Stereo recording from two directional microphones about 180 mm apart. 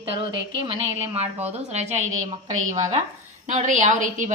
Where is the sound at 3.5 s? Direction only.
45° right (ahead or behind).